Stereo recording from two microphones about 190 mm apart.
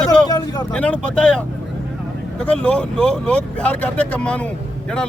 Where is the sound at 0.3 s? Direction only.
20° left (ahead or behind).